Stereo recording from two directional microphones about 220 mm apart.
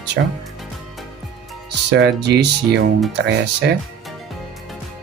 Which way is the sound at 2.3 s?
50° right (ahead or behind).